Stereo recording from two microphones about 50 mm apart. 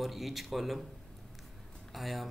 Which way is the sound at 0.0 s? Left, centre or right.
Centre.